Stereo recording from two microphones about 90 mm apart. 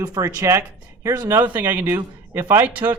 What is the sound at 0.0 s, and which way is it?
Speech, 40° right (ahead or behind).